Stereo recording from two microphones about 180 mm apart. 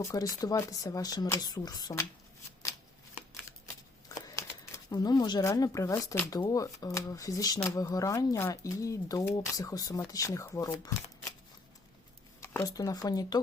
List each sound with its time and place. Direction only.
0.0 s speech: 20° left (ahead or behind)
4.1 s speech: 20° left (ahead or behind)
12.4 s speech: 15° left (ahead or behind)